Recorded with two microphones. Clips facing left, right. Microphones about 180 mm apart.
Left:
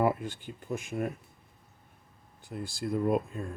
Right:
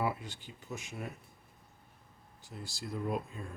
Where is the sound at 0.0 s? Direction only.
50° left (ahead or behind).